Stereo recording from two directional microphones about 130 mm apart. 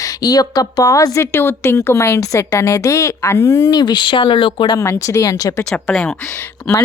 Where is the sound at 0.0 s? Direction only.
30° left (ahead or behind).